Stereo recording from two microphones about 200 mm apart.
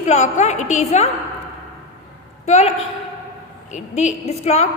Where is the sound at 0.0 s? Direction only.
35° left (ahead or behind).